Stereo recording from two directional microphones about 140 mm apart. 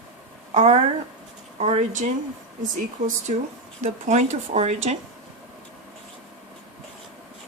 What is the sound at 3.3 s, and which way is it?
Speech, 60° right (ahead or behind).